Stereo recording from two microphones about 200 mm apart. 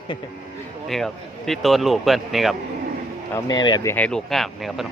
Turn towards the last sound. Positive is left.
turn(degrees=0)  # may be behind; listen again after turning